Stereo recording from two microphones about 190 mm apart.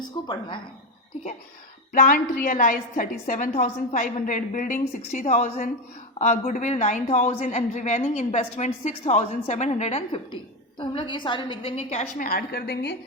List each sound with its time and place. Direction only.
0.0 s a woman's voice: 20° left (ahead or behind)
1.9 s a woman's voice: 45° left (ahead or behind)
12.3 s a woman's voice: 55° left (ahead or behind)